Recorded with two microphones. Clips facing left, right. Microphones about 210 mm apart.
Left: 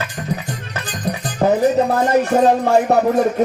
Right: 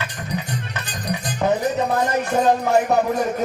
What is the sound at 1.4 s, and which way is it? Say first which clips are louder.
Music: left 5 dB; 35° left (ahead or behind).